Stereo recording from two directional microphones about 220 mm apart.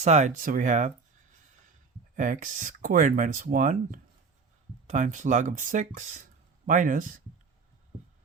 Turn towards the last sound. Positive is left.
turn(degrees=-35)  # may be behind; listen again after turning